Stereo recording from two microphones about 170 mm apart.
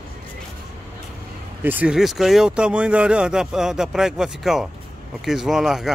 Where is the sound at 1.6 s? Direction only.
10° right (ahead or behind).